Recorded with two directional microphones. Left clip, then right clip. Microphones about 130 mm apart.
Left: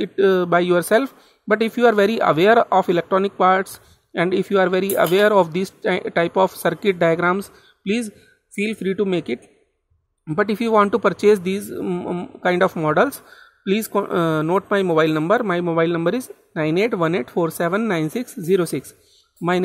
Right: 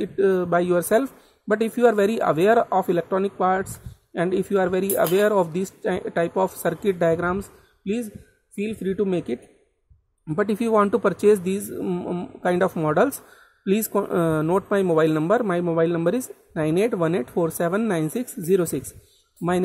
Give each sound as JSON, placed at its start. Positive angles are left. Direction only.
{"t": 0.0, "sound": "speech", "side_deg": 0}
{"t": 8.9, "sound": "speech", "side_deg": 0}